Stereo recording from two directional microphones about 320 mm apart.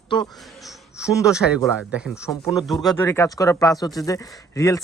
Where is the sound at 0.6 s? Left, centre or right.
Centre.